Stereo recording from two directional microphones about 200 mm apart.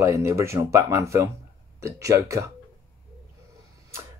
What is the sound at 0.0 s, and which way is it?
Speech, 15° right (ahead or behind).